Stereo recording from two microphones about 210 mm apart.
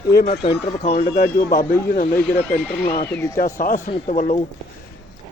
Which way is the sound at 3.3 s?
40° left (ahead or behind).